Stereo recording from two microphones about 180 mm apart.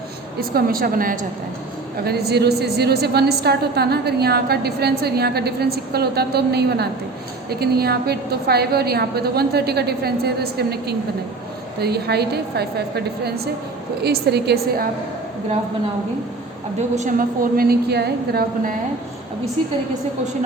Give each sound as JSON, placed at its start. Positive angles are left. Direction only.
{"t": 0.3, "sound": "a woman's voice", "side_deg": -55}
{"t": 2.0, "sound": "a woman's voice", "side_deg": -60}
{"t": 16.9, "sound": "a woman's voice", "side_deg": -45}